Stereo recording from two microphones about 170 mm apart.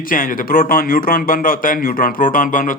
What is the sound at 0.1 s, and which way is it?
Speech, 55° left (ahead or behind).